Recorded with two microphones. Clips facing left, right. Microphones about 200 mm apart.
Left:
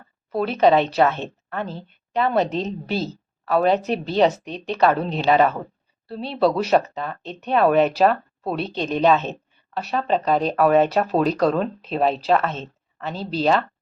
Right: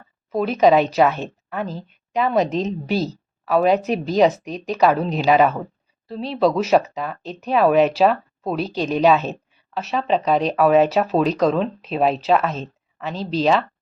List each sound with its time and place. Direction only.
0.3 s a woman's voice: 5° right (ahead or behind)
2.4 s a woman's voice: 35° left (ahead or behind)
2.9 s a woman's voice: 40° right (ahead or behind)
3.4 s a woman's voice: 5° right (ahead or behind)
11.3 s speech: 10° left (ahead or behind)
11.9 s speech: 5° right (ahead or behind)